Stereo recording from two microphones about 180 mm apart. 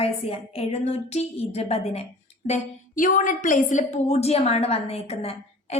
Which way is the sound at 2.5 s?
45° left (ahead or behind).